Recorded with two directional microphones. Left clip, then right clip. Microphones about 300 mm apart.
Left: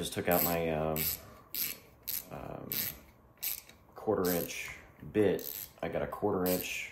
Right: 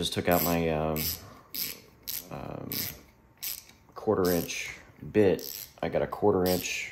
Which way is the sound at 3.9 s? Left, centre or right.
Right.